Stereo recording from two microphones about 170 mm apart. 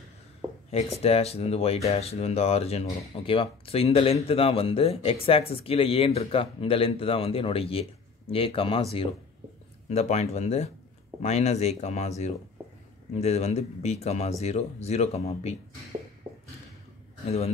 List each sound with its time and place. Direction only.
0.7 s speech: 40° left (ahead or behind)
9.8 s speech: 40° left (ahead or behind)